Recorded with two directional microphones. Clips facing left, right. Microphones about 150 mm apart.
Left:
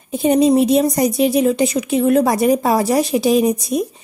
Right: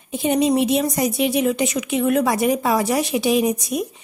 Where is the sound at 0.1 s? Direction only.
40° left (ahead or behind).